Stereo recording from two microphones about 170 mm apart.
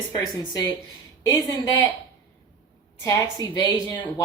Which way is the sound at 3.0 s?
20° left (ahead or behind).